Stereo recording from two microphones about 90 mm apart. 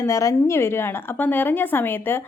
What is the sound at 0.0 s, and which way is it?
Speech, 35° left (ahead or behind).